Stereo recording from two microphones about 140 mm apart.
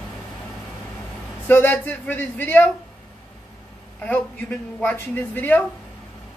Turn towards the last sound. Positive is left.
turn(degrees=10)  # may be behind; listen again after turning